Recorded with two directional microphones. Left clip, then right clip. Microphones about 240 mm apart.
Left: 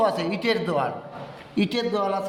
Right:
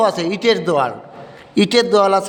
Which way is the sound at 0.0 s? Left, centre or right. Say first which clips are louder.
Right 7 dB; right.